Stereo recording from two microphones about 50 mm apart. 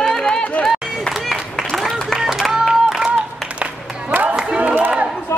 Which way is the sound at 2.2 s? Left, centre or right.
Centre.